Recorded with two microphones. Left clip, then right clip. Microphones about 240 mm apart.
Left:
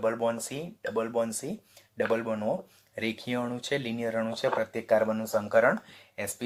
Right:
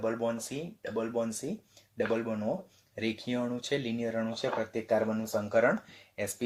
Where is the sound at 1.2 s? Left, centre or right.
Centre.